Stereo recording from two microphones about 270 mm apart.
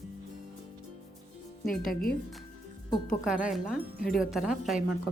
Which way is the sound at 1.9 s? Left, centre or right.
Left.